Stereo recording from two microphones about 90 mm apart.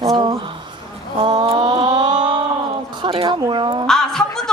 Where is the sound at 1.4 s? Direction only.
60° right (ahead or behind).